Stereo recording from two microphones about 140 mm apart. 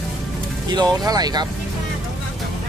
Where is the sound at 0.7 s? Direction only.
30° right (ahead or behind).